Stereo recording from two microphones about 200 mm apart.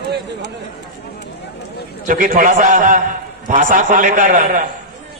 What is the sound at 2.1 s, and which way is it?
A man's voice, 40° right (ahead or behind).